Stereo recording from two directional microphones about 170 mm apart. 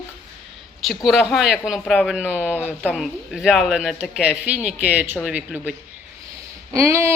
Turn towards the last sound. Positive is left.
turn(degrees=-15)  # may be behind; listen again after turning